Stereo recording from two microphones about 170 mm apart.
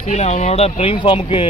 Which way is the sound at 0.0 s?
40° left (ahead or behind).